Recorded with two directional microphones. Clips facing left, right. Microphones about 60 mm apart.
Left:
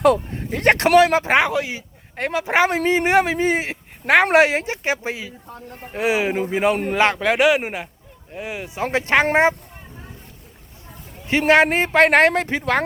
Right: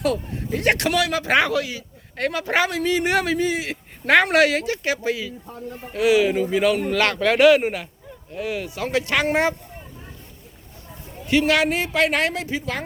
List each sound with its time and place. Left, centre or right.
0.0 s speech: left; by 2.6 s centre
2.6 s a man's voice: left
3.4 s a man's voice: left
4.0 s speech: centre
4.3 s speech: left
11.3 s a man's voice: left